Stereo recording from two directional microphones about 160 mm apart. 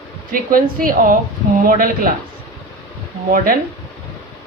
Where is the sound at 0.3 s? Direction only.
60° right (ahead or behind).